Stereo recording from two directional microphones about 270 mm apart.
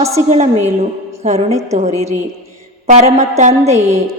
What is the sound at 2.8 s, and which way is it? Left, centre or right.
A woman's voice, right.